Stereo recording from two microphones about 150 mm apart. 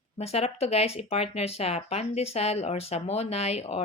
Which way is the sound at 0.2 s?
45° left (ahead or behind).